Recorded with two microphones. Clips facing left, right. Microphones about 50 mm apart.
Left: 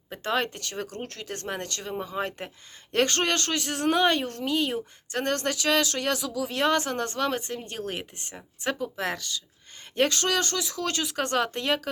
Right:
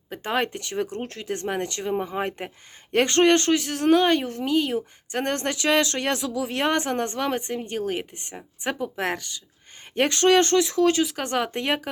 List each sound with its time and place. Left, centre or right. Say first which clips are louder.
0.2 s speech: right 2 dB; right
3.7 s a woman's voice: right 3 dB; centre
5.1 s speech: right 1 dB; right
8.8 s speech: right 3 dB; right
11.0 s a woman's voice: right 1 dB; centre
11.5 s speech: right 2 dB; right